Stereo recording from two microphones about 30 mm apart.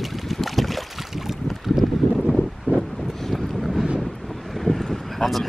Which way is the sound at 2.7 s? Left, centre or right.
Left.